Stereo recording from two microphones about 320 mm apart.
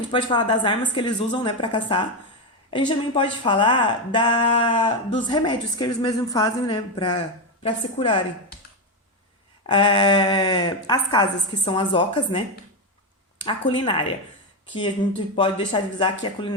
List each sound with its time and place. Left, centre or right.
0.1 s speech: centre
9.6 s speech: centre
13.4 s speech: centre
15.4 s speech: centre